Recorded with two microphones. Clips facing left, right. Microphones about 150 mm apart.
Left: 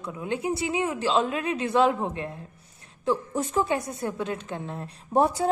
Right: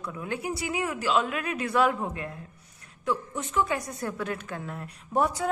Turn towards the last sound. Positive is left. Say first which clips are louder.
# left 4 dB
turn(degrees=30)  # may be behind; listen again after turning